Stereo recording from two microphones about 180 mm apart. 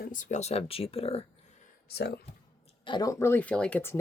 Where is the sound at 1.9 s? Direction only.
65° left (ahead or behind).